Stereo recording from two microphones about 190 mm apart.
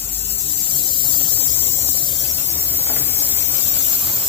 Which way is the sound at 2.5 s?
10° right (ahead or behind).